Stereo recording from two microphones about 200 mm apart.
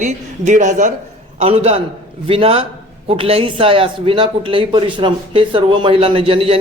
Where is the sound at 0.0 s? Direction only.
40° right (ahead or behind).